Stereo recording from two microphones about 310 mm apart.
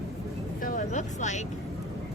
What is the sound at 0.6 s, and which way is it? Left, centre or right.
Speech, left.